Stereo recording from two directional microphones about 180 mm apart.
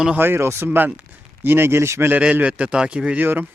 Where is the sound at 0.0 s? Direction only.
10° right (ahead or behind).